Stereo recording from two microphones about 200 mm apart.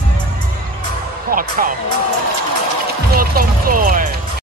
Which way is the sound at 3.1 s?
45° right (ahead or behind).